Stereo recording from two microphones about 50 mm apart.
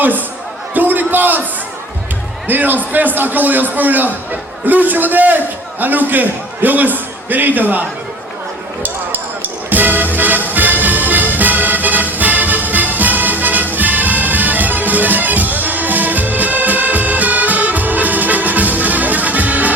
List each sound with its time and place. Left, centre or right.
0.7 s a sound: right
2.5 s a man's voice: right
9.6 s music: right